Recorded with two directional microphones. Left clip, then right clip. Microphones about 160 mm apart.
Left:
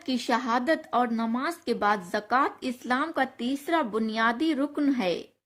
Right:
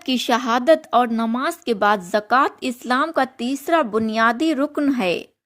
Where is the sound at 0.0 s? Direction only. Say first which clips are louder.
Right 7 dB; 55° right (ahead or behind).